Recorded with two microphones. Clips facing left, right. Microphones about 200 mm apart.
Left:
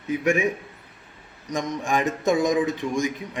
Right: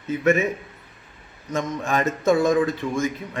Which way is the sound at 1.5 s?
15° left (ahead or behind).